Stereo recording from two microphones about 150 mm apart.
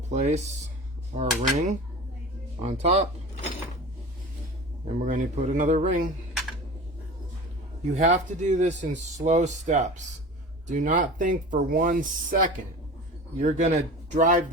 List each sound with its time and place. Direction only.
0.1 s speech: 50° right (ahead or behind)
4.9 s speech: 55° right (ahead or behind)
7.9 s speech: 55° right (ahead or behind)
13.4 s speech: 50° right (ahead or behind)